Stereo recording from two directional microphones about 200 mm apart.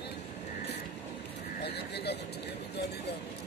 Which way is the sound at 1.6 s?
55° left (ahead or behind).